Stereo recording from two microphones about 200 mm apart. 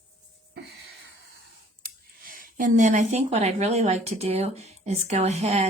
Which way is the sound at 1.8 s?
45° right (ahead or behind).